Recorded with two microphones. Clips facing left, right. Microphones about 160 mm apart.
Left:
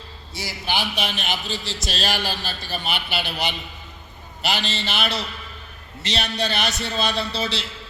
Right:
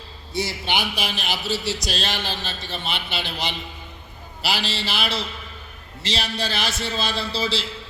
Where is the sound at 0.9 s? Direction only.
5° right (ahead or behind).